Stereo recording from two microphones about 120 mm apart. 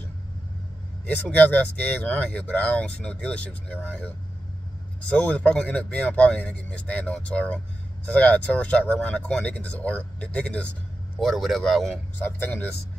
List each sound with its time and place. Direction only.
1.0 s speech: 15° left (ahead or behind)
5.1 s speech: 10° left (ahead or behind)
11.1 s speech: centre (ahead or behind)
12.2 s speech: 15° left (ahead or behind)